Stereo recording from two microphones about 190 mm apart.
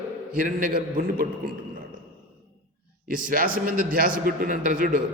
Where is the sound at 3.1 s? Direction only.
45° right (ahead or behind).